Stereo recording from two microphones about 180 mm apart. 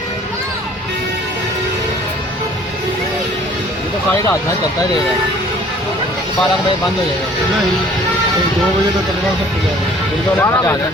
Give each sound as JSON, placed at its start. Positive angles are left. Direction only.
{"t": 10.3, "sound": "speech", "side_deg": 15}